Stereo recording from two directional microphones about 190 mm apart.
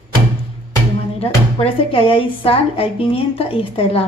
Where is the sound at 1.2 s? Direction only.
30° left (ahead or behind).